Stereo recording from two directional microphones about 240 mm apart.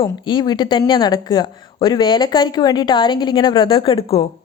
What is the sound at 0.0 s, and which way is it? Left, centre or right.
Speech, centre.